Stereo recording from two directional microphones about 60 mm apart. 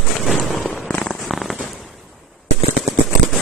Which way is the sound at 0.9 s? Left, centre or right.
Centre.